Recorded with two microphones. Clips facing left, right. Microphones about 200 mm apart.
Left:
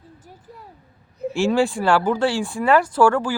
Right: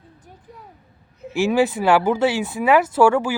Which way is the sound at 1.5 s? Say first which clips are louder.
Right 3 dB; 20° right (ahead or behind).